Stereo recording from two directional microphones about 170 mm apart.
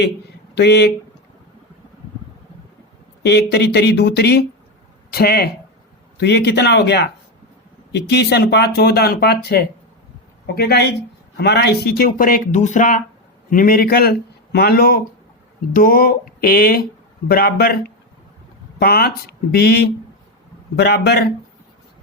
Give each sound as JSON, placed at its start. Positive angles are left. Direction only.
{"t": 0.5, "sound": "speech", "side_deg": 80}
{"t": 3.2, "sound": "speech", "side_deg": 80}
{"t": 6.1, "sound": "speech", "side_deg": 80}
{"t": 11.3, "sound": "speech", "side_deg": 80}